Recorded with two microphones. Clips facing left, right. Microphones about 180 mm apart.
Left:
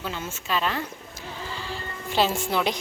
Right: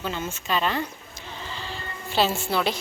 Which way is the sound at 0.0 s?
5° left (ahead or behind).